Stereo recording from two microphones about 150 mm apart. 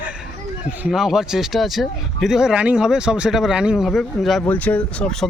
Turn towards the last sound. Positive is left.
turn(degrees=10)  # may be behind; listen again after turning